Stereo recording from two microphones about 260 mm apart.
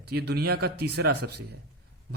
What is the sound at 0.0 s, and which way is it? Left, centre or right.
A man's voice, right.